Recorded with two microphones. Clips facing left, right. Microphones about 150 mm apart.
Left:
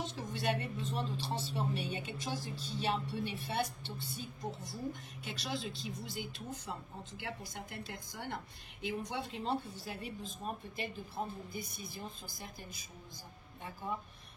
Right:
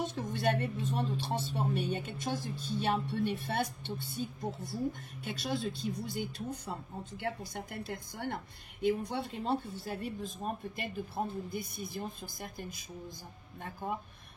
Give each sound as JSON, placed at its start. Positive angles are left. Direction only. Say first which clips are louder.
{"t": 0.0, "sound": "speech", "louder": "right 5 dB", "side_deg": -55}
{"t": 5.2, "sound": "speech", "louder": "right 5 dB", "side_deg": -50}
{"t": 13.8, "sound": "speech", "louder": "right 3 dB", "side_deg": -50}